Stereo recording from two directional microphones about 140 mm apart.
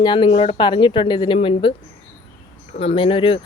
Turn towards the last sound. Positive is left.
turn(degrees=40)  # may be behind; listen again after turning